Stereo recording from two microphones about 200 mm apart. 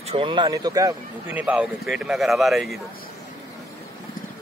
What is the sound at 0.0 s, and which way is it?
Speech, 25° right (ahead or behind).